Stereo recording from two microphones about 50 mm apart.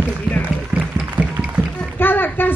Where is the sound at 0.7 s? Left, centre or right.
Right.